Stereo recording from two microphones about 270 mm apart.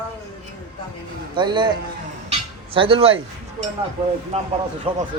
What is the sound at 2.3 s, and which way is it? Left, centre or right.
Cutlery, centre.